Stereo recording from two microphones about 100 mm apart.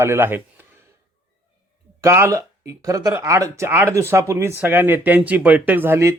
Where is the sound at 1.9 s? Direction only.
30° right (ahead or behind).